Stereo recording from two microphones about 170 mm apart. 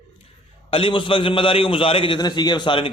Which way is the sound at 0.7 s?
30° left (ahead or behind).